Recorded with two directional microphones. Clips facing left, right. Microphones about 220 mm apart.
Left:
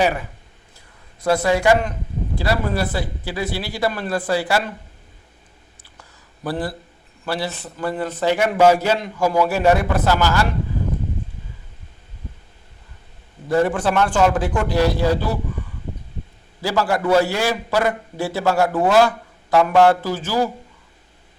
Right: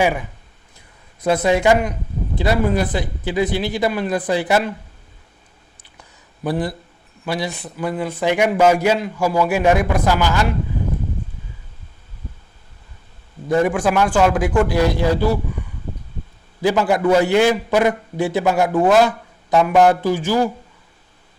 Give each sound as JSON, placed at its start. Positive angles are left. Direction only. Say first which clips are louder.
{"t": 0.0, "sound": "a man's voice", "louder": "right 1 dB", "side_deg": -15}
{"t": 6.0, "sound": "a sound", "louder": "right 4 dB", "side_deg": -15}
{"t": 7.3, "sound": "a man's voice", "louder": "right 1 dB", "side_deg": -15}
{"t": 13.5, "sound": "a man's voice", "louder": "right 1 dB", "side_deg": -10}
{"t": 16.6, "sound": "a man's voice", "louder": "right 4 dB", "side_deg": -20}